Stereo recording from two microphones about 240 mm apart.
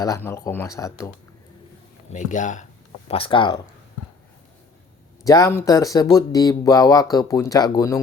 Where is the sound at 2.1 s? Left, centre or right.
Left.